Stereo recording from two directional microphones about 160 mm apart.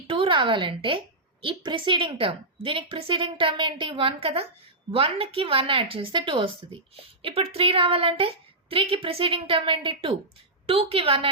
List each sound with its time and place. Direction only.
0.1 s a woman's voice: 35° right (ahead or behind)